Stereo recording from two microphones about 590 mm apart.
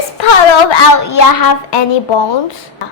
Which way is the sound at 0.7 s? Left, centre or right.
Left.